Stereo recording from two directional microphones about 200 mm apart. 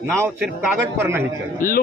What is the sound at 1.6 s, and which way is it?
Speech, 45° left (ahead or behind).